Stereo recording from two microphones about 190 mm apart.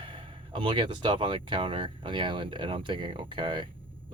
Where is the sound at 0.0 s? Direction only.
25° right (ahead or behind).